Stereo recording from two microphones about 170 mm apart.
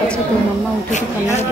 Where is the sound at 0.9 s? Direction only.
45° left (ahead or behind).